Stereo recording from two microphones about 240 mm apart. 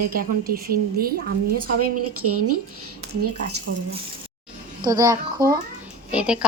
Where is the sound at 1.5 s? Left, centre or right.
Right.